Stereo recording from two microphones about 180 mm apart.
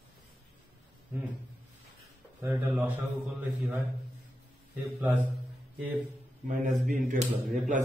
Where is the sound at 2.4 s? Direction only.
10° right (ahead or behind).